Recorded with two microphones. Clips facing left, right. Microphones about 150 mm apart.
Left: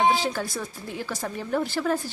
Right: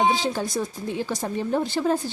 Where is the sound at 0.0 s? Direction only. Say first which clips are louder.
Right 1 dB; 20° right (ahead or behind).